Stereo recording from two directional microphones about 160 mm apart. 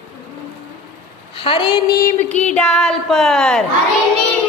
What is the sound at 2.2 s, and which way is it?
Music, 45° left (ahead or behind).